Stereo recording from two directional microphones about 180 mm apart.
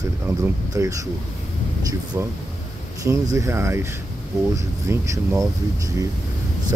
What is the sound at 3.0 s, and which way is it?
Speech, 15° right (ahead or behind).